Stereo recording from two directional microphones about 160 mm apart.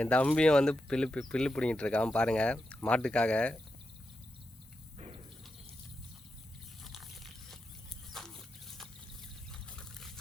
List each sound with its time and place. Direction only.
0.0 s speech: 10° left (ahead or behind)
4.9 s insect: 40° right (ahead or behind)
6.8 s crunch: centre (ahead or behind)
8.1 s a sound: centre (ahead or behind)
9.5 s trickle: 5° left (ahead or behind)